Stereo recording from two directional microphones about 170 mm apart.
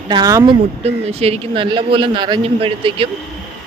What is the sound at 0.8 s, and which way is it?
Speech, 40° right (ahead or behind).